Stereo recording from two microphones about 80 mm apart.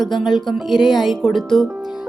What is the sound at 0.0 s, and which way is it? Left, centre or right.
A woman's voice, centre.